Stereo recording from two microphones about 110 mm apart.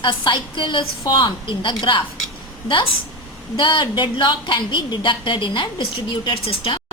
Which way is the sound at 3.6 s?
45° left (ahead or behind).